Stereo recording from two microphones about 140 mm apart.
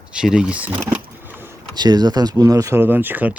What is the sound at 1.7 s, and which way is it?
Speech, 30° right (ahead or behind).